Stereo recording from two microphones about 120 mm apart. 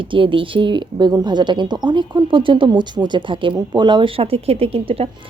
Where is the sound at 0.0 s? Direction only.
45° right (ahead or behind).